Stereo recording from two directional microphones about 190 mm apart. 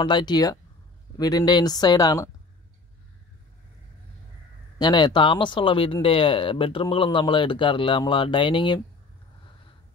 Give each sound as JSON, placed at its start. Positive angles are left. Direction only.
{"t": 0.0, "sound": "speech", "side_deg": 25}
{"t": 4.7, "sound": "speech", "side_deg": 20}